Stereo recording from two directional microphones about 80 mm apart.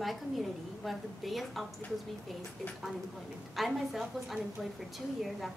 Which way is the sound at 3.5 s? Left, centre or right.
Centre.